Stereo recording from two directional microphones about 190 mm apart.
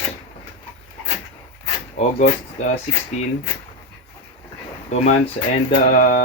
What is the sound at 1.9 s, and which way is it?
Speech, 40° left (ahead or behind).